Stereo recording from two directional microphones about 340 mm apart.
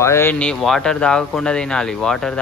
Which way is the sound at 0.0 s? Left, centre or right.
Centre.